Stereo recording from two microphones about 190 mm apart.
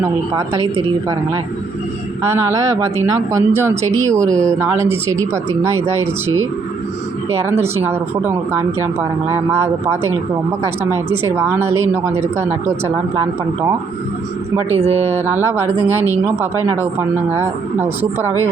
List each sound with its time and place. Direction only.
0.0 s speech: 15° right (ahead or behind)
2.2 s speech: 15° right (ahead or behind)
14.8 s speech: 35° right (ahead or behind)
15.3 s speech: 10° right (ahead or behind)